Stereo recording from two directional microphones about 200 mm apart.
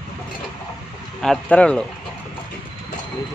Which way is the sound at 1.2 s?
5° left (ahead or behind).